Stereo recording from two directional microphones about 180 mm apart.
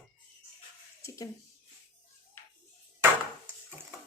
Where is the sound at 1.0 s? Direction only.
20° left (ahead or behind).